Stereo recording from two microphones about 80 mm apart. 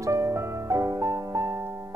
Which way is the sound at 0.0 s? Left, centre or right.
Right.